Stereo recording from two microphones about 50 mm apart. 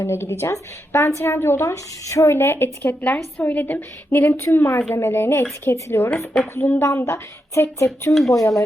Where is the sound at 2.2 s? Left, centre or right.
Left.